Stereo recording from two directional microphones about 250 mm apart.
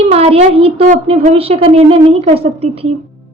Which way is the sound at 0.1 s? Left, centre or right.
Right.